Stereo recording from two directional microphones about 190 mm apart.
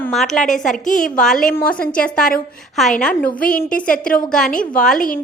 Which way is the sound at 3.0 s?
5° left (ahead or behind).